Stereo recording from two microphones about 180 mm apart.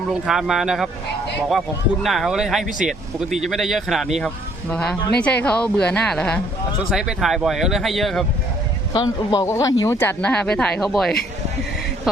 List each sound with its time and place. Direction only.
0.1 s speech: 5° right (ahead or behind)
2.0 s speech: centre (ahead or behind)
8.9 s speech: 20° left (ahead or behind); by 11.2 s centre (ahead or behind)